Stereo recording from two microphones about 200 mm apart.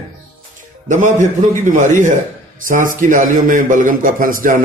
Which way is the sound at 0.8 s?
40° right (ahead or behind).